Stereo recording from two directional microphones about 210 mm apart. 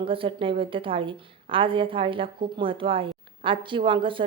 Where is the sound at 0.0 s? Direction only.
25° right (ahead or behind).